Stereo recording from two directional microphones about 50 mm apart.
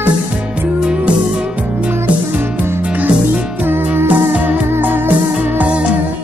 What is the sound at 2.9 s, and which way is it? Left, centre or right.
Music, right.